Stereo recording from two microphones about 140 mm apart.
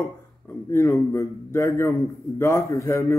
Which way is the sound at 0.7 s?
20° left (ahead or behind).